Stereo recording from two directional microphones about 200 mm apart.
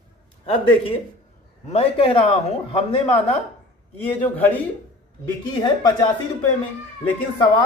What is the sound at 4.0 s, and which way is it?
Speech, 10° left (ahead or behind).